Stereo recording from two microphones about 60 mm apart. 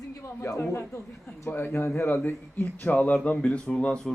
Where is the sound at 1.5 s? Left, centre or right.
Left.